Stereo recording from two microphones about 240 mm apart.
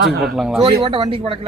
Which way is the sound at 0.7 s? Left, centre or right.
Centre.